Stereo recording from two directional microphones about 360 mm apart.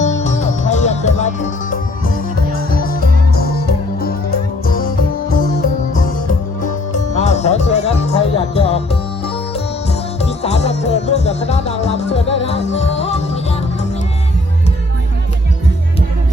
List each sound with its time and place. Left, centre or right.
0.0 s music: centre
2.7 s music: left
7.1 s music: centre
10.2 s music: centre